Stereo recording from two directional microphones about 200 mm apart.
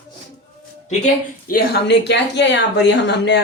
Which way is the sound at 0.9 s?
40° left (ahead or behind).